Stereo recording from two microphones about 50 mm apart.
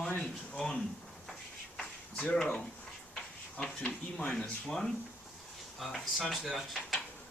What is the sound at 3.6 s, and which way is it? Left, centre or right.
Speech, left.